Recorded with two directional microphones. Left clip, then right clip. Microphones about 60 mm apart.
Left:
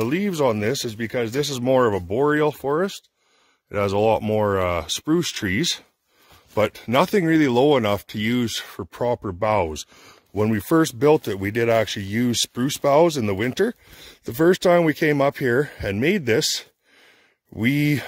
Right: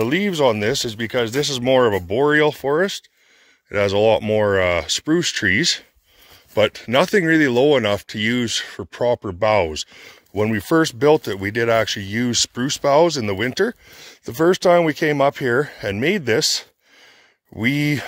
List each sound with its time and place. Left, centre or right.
0.0 s speech: centre
0.3 s speech: centre
1.4 s speech: centre
1.8 s speech: centre
5.1 s speech: left
9.0 s speech: centre
9.7 s speech: left
10.6 s speech: left
11.2 s speech: left
12.1 s speech: left
15.8 s speech: left